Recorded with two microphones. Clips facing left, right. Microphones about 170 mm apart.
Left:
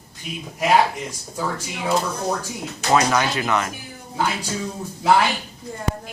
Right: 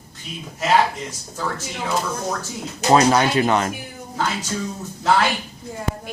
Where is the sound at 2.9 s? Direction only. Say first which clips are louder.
Right 4 dB; 30° right (ahead or behind).